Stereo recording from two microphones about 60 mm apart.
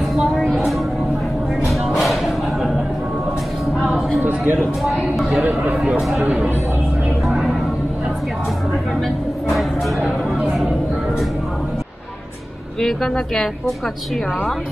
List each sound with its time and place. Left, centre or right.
1.7 s music: centre
4.2 s a sound: right
4.6 s speech: centre
5.4 s a man's voice: right
5.9 s speech: centre
7.2 s a sound: centre
9.0 s speech: centre
10.0 s speech: centre
12.8 s speech: centre